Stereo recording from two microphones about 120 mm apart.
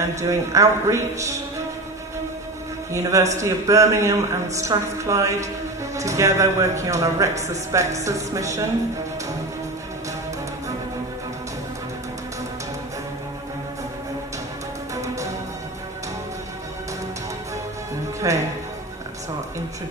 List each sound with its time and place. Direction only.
0.0 s speech: 25° right (ahead or behind)
2.9 s speech: 25° right (ahead or behind)
18.2 s speech: 30° right (ahead or behind)